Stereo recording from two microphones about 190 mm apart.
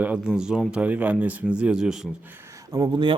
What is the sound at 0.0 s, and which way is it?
Speech, 5° right (ahead or behind).